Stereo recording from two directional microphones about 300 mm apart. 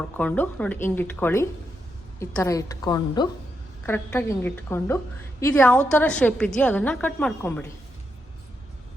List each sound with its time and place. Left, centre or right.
0.2 s a woman's voice: centre